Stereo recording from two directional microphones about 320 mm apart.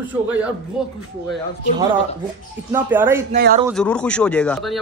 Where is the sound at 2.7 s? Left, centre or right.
Centre.